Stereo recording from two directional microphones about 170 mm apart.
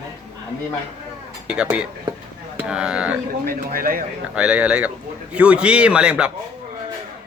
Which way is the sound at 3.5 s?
55° right (ahead or behind).